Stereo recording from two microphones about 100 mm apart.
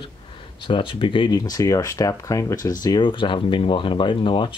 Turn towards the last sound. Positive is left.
turn(degrees=55)  # may be behind; listen again after turning